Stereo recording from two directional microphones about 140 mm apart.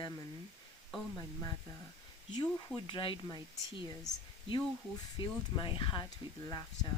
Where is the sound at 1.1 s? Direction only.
25° left (ahead or behind).